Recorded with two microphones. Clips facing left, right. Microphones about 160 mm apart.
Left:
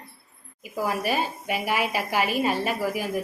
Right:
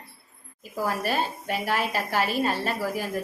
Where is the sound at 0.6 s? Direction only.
15° left (ahead or behind).